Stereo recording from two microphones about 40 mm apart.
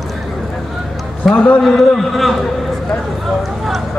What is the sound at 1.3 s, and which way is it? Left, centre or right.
A man's voice, centre.